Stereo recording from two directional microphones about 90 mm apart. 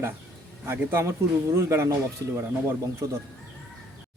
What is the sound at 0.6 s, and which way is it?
Speech, 25° right (ahead or behind).